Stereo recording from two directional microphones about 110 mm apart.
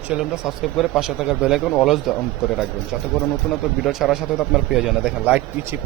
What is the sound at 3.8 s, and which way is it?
A man's voice, 5° right (ahead or behind).